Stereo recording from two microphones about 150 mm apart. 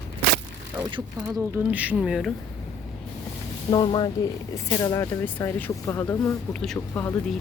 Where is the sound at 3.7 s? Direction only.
30° left (ahead or behind).